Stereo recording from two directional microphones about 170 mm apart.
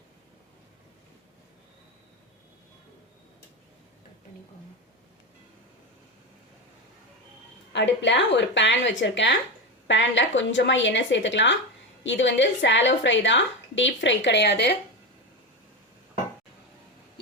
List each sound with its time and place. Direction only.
7.7 s a woman's voice: 90° left